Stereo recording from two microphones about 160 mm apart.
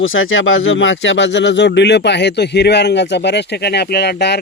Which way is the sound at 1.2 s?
90° left.